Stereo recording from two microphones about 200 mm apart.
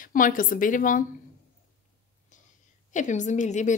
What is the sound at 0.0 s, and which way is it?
A woman's voice, 40° left (ahead or behind).